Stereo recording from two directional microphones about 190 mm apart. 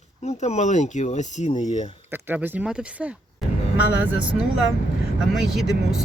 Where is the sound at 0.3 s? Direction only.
35° left (ahead or behind).